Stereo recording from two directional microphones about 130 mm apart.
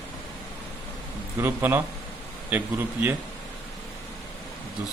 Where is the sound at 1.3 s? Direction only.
15° right (ahead or behind).